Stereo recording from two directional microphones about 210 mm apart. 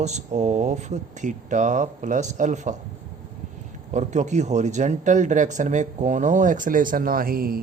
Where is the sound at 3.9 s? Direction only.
35° right (ahead or behind).